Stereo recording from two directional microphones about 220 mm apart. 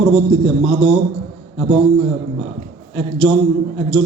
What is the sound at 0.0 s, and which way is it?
Speech, 65° right (ahead or behind).